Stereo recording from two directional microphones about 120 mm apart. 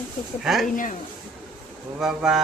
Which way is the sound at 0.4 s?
Centre (ahead or behind).